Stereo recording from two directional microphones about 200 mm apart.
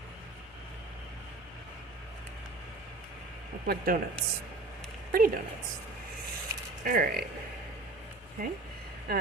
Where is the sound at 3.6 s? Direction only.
45° right (ahead or behind).